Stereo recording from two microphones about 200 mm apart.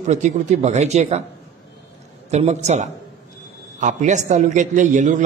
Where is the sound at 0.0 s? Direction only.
35° right (ahead or behind).